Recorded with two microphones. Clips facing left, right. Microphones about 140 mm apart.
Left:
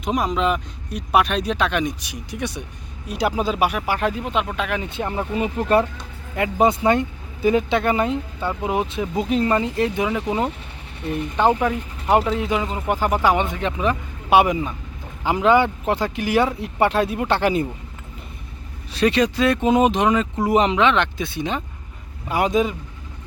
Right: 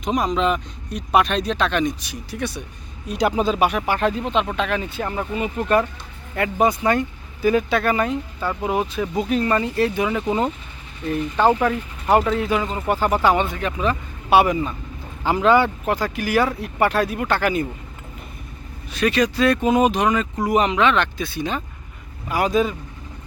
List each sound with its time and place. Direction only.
0.0 s speech: 5° left (ahead or behind); by 5.8 s 30° left (ahead or behind)
6.3 s speech: 20° left (ahead or behind)
18.9 s speech: 30° left (ahead or behind)